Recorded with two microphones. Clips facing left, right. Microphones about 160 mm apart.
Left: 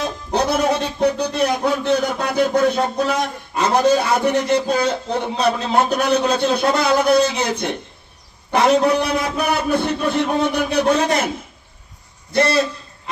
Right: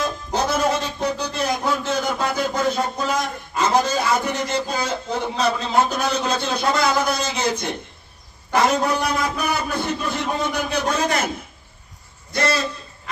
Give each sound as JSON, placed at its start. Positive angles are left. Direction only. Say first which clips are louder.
{"t": 0.0, "sound": "music", "louder": "left 3 dB", "side_deg": 60}
{"t": 5.4, "sound": "a man's voice", "louder": "left 2 dB", "side_deg": 60}